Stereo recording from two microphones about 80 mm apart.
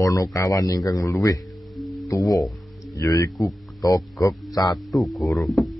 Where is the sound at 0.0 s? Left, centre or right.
Left.